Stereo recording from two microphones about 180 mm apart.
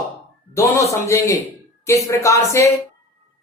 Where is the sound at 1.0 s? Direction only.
15° left (ahead or behind).